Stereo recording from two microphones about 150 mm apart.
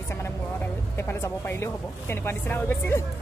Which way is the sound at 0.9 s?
15° left (ahead or behind).